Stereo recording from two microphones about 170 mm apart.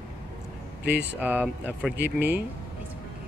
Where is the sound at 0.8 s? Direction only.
75° right (ahead or behind).